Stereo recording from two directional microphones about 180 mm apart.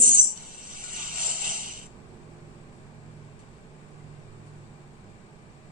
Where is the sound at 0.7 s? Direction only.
50° right (ahead or behind).